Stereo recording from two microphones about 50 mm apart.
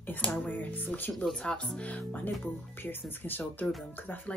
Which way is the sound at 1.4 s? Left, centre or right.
Left.